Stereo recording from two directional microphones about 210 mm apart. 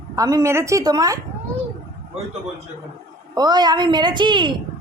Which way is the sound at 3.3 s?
20° right (ahead or behind).